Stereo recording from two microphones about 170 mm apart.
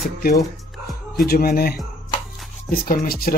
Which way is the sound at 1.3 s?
60° left (ahead or behind).